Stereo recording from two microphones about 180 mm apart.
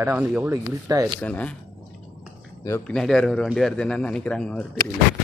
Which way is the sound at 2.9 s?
5° left (ahead or behind).